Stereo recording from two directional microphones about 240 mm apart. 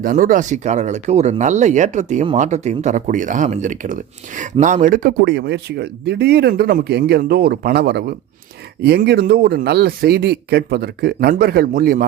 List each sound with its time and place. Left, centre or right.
0.0 s speech: right